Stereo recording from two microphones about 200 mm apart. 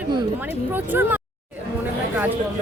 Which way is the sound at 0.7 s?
10° right (ahead or behind).